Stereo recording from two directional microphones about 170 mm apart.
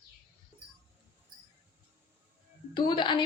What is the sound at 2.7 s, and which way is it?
Speech, 25° left (ahead or behind).